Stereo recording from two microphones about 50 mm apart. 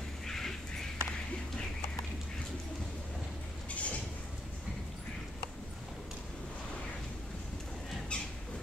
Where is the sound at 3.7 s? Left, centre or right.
Left.